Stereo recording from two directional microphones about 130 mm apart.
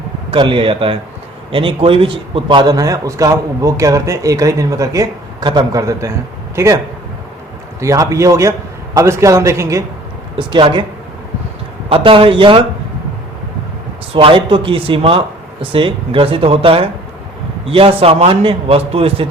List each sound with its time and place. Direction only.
0.3 s a man's voice: 40° right (ahead or behind); by 6.7 s 25° right (ahead or behind)
7.8 s a man's voice: 25° right (ahead or behind)
10.3 s speech: 40° right (ahead or behind)
11.9 s a man's voice: 45° right (ahead or behind)
14.1 s a man's voice: 45° right (ahead or behind)